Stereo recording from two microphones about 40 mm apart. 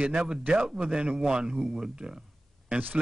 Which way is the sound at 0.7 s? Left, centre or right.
Centre.